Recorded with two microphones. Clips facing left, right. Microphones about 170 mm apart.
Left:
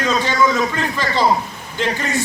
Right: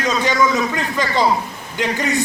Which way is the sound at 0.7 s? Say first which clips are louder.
Right 1 dB; 15° right (ahead or behind).